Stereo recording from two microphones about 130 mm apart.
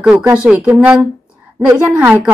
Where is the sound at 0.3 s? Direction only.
10° right (ahead or behind).